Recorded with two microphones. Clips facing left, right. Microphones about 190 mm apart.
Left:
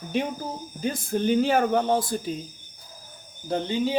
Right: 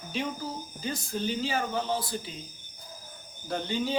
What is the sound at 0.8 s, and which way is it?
Speech, 55° left (ahead or behind).